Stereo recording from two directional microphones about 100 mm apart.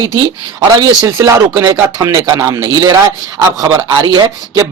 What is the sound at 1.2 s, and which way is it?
Speech, 35° right (ahead or behind).